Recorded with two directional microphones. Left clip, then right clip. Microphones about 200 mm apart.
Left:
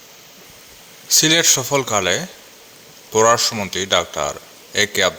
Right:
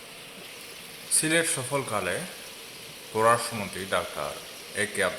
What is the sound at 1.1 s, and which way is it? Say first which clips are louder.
Speech: left 11 dB; 45° left (ahead or behind).